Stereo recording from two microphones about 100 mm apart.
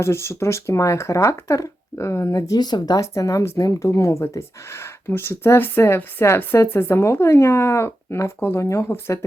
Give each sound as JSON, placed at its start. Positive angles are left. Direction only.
{"t": 0.0, "sound": "speech", "side_deg": 25}